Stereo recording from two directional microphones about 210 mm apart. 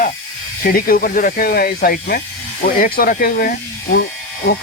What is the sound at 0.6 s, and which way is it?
Speech, 45° left (ahead or behind).